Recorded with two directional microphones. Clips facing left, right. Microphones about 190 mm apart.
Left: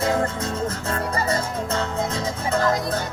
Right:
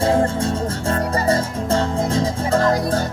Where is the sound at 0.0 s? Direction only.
30° right (ahead or behind).